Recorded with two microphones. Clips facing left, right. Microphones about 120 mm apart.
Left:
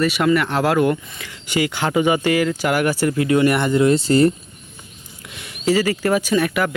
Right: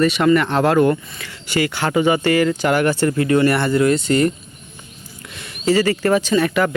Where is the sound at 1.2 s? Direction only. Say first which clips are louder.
Right 1 dB; 15° left (ahead or behind).